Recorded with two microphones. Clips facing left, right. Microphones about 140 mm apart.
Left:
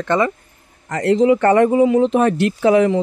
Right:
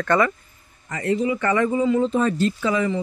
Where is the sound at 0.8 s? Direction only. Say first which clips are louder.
Left 8 dB; 75° left (ahead or behind).